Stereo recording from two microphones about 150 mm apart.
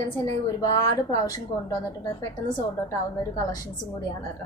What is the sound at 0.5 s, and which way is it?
Speech, 25° left (ahead or behind).